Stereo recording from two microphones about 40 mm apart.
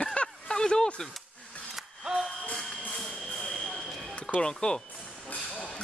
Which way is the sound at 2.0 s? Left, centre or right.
Centre.